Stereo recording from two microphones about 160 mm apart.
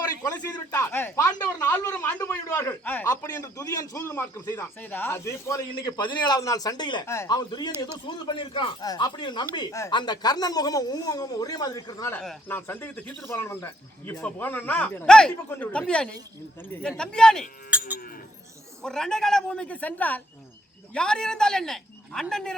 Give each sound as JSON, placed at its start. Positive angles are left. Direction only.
{"t": 0.0, "sound": "a sound", "side_deg": 20}
{"t": 0.3, "sound": "speech", "side_deg": 15}
{"t": 6.0, "sound": "speech", "side_deg": 30}
{"t": 7.0, "sound": "speech", "side_deg": 15}
{"t": 17.7, "sound": "cattle", "side_deg": -10}
{"t": 18.8, "sound": "speech", "side_deg": 5}